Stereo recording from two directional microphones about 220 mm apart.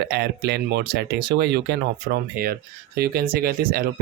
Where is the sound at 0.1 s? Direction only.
50° right (ahead or behind).